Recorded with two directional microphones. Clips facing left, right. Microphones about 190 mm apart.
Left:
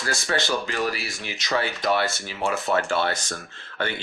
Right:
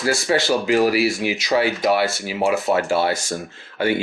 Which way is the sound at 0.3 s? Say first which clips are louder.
Right 6 dB; 20° right (ahead or behind).